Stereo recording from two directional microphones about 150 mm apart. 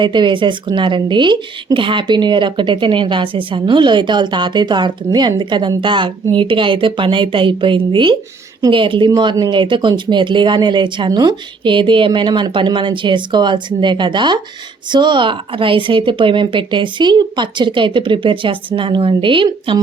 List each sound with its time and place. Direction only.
0.0 s a woman's voice: 30° right (ahead or behind)